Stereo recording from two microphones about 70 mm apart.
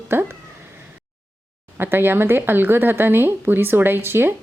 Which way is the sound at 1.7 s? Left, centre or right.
Right.